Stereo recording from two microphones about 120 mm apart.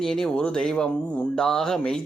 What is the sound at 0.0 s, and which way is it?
Speech, 5° left (ahead or behind).